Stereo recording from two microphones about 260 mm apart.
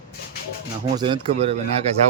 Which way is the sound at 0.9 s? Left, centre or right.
Centre.